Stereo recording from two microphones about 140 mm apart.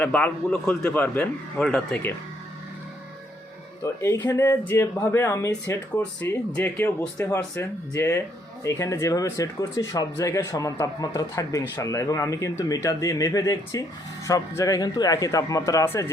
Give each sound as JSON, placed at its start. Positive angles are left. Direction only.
{"t": 0.0, "sound": "a man's voice", "side_deg": 10}
{"t": 3.8, "sound": "a man's voice", "side_deg": 20}